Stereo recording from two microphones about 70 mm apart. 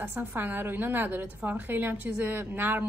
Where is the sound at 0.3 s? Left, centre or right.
Right.